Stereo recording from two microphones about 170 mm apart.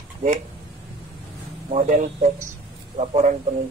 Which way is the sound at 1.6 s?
45° right (ahead or behind).